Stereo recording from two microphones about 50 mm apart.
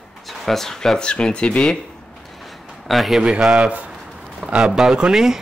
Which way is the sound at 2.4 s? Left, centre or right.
Centre.